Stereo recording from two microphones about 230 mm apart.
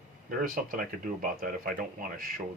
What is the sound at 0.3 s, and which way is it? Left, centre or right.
Speech, right.